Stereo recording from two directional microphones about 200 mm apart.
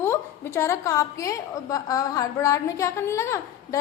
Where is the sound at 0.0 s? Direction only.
10° left (ahead or behind).